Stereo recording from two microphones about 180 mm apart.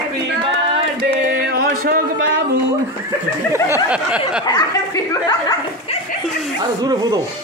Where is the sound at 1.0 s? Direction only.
60° right (ahead or behind).